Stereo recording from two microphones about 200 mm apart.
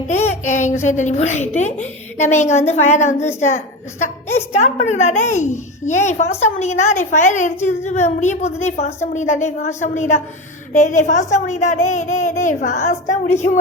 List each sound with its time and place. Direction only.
0.1 s a child's voice: 35° left (ahead or behind)